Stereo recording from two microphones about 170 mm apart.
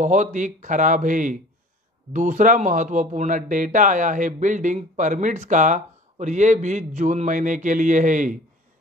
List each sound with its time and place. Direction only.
0.0 s speech: 45° right (ahead or behind)